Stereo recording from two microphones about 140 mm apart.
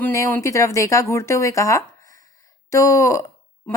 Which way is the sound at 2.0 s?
70° right (ahead or behind).